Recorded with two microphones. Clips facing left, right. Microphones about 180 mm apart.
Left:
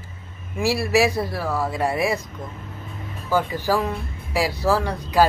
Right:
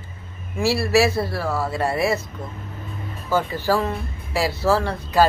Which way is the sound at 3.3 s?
15° left (ahead or behind).